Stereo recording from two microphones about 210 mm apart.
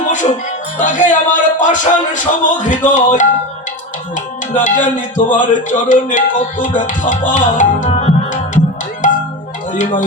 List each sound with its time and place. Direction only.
0.0 s music: 35° left (ahead or behind)
0.8 s speech: 35° left (ahead or behind)